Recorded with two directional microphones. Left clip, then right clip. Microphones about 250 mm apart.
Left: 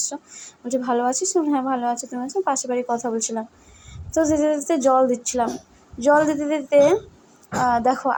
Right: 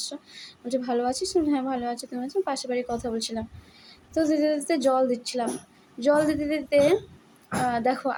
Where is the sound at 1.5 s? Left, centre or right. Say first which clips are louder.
Left 5 dB; centre.